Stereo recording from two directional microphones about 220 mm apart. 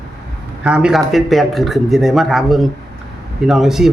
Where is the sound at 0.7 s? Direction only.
5° right (ahead or behind).